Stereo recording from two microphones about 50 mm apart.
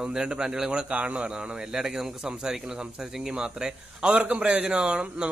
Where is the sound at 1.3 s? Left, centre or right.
Centre.